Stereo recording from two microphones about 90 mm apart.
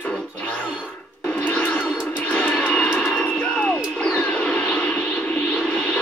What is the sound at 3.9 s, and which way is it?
Music, 5° left (ahead or behind).